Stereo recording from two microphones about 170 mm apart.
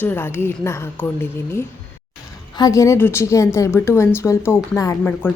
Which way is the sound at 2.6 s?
20° left (ahead or behind).